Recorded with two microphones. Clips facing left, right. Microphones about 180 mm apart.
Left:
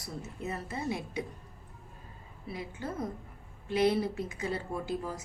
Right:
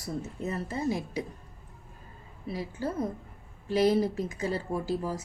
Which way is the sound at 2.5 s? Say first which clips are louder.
Right 5 dB; 35° right (ahead or behind).